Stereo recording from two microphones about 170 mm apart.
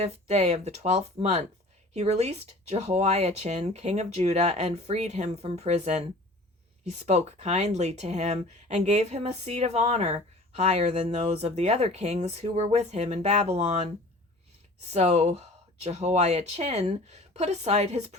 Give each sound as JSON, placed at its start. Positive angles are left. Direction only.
{"t": 0.0, "sound": "speech", "side_deg": -40}